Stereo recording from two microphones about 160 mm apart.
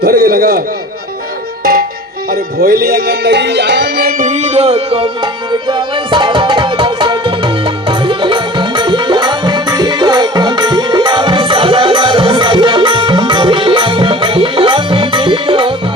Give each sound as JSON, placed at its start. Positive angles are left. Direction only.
{"t": 0.0, "sound": "a man's voice", "side_deg": -70}
{"t": 2.3, "sound": "music", "side_deg": -65}
{"t": 4.2, "sound": "speech", "side_deg": -45}
{"t": 5.5, "sound": "tabla", "side_deg": -30}